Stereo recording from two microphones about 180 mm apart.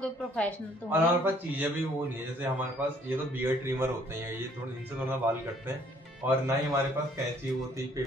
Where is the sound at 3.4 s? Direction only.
10° right (ahead or behind).